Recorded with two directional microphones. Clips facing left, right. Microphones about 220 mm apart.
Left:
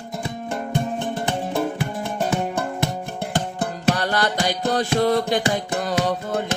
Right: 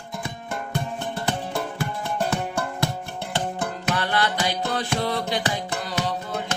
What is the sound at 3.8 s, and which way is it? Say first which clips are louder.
Music: left 4 dB; 40° left (ahead or behind).